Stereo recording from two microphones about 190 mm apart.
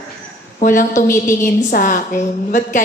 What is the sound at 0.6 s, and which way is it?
A woman's voice, 45° left (ahead or behind).